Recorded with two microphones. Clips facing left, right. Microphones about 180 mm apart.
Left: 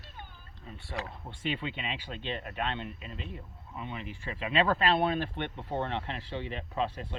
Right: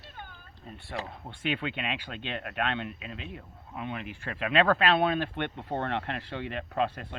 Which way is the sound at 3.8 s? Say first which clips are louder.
Right 3 dB; 60° right (ahead or behind).